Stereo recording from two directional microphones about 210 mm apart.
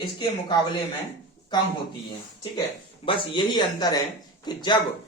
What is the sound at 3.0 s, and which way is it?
A man's voice, 25° left (ahead or behind).